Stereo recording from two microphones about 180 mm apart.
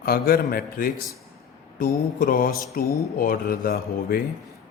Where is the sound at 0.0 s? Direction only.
55° left (ahead or behind).